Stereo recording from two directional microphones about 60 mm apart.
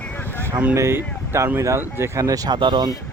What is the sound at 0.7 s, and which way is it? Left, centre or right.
Speech, right.